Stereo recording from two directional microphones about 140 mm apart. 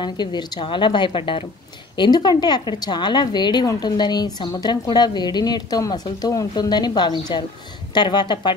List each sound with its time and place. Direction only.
0.0 s a woman's voice: 30° left (ahead or behind)